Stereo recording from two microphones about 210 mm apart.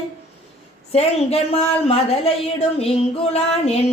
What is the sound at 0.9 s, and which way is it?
A woman's voice, 30° left (ahead or behind).